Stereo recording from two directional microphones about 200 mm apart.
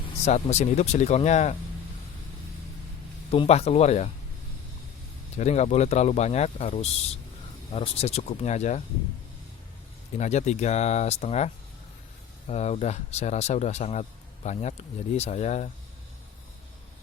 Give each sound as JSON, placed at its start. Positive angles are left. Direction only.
{"t": 0.3, "sound": "speech", "side_deg": 35}
{"t": 3.3, "sound": "speech", "side_deg": 30}
{"t": 5.4, "sound": "speech", "side_deg": 35}
{"t": 10.2, "sound": "speech", "side_deg": 35}